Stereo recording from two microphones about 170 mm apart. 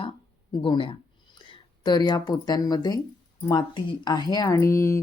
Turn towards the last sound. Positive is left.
turn(degrees=15)  # may be behind; listen again after turning